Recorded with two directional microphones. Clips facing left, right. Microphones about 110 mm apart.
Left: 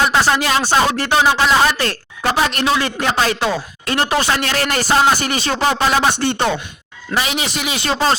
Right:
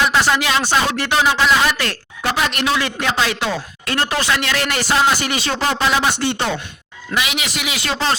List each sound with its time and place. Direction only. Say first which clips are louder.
0.1 s speech: left 1 dB; 30° left (ahead or behind)
3.9 s speech: left 3 dB; 25° left (ahead or behind)
4.2 s speech: left 1 dB; 35° left (ahead or behind)
7.1 s speech: left 2 dB; 35° left (ahead or behind)